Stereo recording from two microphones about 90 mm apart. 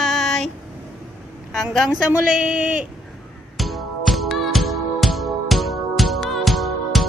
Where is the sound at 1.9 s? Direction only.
10° right (ahead or behind).